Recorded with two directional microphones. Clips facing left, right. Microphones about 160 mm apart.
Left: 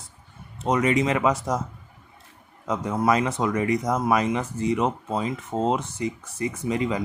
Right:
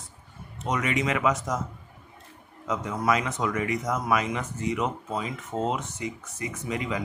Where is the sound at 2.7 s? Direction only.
35° left (ahead or behind).